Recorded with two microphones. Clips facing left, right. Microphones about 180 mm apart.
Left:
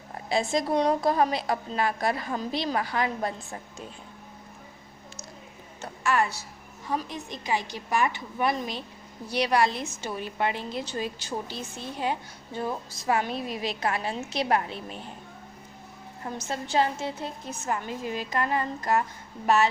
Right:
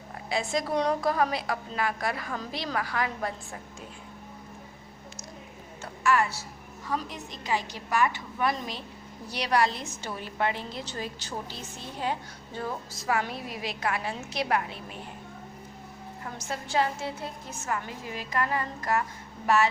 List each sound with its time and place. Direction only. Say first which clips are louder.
0.3 s a woman's voice: left 3 dB; 30° left (ahead or behind)
5.8 s a sound: even; 20° left (ahead or behind)
6.9 s a woman's voice: left 2 dB; 15° left (ahead or behind)
12.5 s a woman's voice: left 3 dB; 20° left (ahead or behind)
16.2 s a woman's voice: left 4 dB; 25° left (ahead or behind)